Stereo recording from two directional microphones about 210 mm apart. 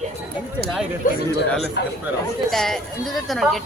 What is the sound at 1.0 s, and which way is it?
Speech, 40° left (ahead or behind).